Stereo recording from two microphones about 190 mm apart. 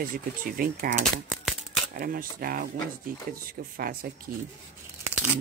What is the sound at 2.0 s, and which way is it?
Speech, 50° right (ahead or behind).